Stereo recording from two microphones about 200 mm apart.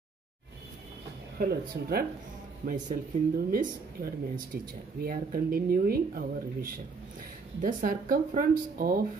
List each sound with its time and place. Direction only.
1.4 s speech: 50° right (ahead or behind)